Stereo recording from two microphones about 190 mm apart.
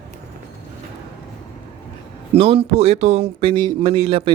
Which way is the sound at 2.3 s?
30° right (ahead or behind).